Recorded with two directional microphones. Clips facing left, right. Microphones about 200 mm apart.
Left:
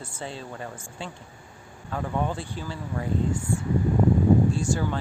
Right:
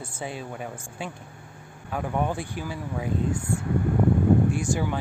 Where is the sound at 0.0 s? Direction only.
10° right (ahead or behind).